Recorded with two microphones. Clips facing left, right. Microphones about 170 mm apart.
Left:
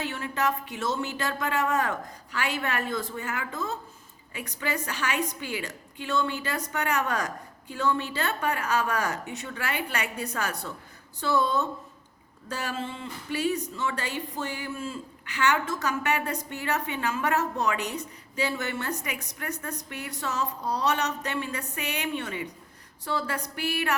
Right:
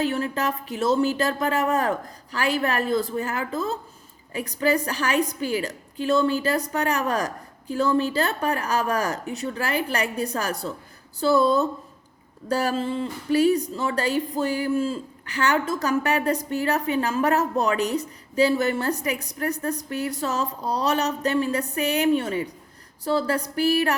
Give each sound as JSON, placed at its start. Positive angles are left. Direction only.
{"t": 0.0, "sound": "a woman's voice", "side_deg": -35}